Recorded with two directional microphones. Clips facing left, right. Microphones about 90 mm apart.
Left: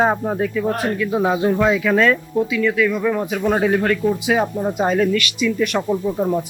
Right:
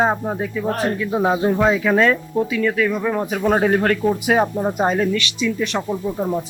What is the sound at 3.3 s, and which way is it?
Speech, 30° right (ahead or behind).